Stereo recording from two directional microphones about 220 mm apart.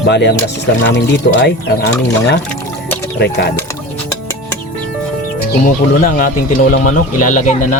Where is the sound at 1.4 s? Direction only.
50° left (ahead or behind).